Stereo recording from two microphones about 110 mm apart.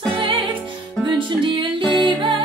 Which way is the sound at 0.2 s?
50° right (ahead or behind).